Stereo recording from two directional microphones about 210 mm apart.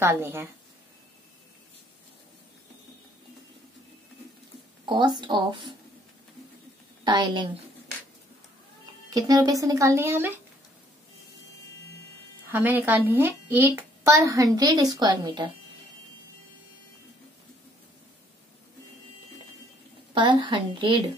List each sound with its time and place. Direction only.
0.0 s a woman's voice: 10° right (ahead or behind)
4.8 s speech: 20° right (ahead or behind)
7.1 s speech: 20° right (ahead or behind)
9.1 s a woman's voice: 15° right (ahead or behind)
12.4 s a woman's voice: 10° right (ahead or behind)
20.2 s speech: 20° right (ahead or behind)